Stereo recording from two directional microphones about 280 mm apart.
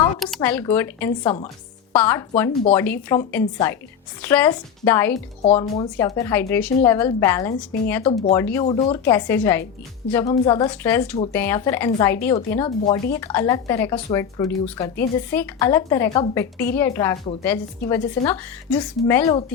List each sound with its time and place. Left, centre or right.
0.3 s a woman's voice: centre
8.6 s a woman's voice: centre
9.1 s a woman's voice: centre